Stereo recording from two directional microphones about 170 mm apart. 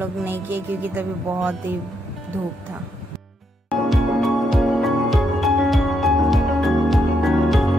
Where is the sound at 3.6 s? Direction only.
Centre (ahead or behind).